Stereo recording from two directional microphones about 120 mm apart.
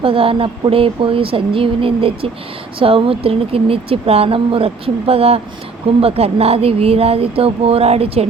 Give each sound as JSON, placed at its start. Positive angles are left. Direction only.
{"t": 0.0, "sound": "speech", "side_deg": -50}